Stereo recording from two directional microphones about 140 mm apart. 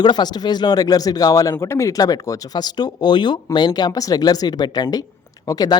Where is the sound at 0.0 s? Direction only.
30° left (ahead or behind).